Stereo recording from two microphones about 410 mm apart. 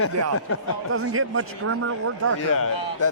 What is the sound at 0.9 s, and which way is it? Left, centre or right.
Speech, right.